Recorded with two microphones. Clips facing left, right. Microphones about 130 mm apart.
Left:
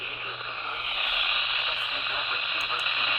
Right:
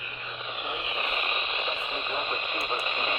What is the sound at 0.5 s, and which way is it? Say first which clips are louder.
Radio: right 7 dB; 20° right (ahead or behind).